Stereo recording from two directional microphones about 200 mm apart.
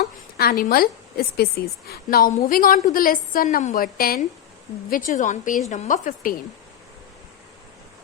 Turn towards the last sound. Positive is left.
turn(degrees=40)  # may be behind; listen again after turning